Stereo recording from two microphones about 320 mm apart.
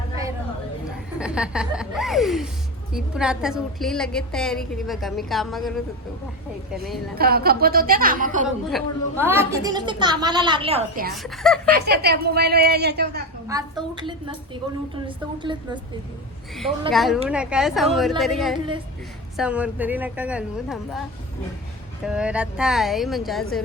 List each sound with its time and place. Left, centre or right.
1.2 s a woman's voice: centre
7.2 s a woman's voice: right
8.4 s a woman's voice: centre; by 11.1 s right
11.1 s a woman's voice: centre
11.7 s a woman's voice: right
13.5 s a woman's voice: centre
16.9 s a woman's voice: centre
22.0 s a woman's voice: centre